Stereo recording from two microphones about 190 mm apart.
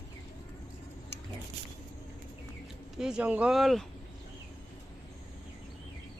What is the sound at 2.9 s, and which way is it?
Speech, 5° right (ahead or behind).